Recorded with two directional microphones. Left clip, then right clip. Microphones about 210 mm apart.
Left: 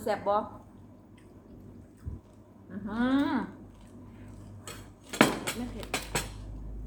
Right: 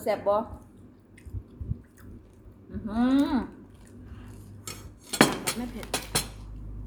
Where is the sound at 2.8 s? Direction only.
5° right (ahead or behind).